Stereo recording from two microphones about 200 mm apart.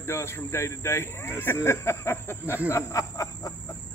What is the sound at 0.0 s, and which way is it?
Speech, 10° left (ahead or behind).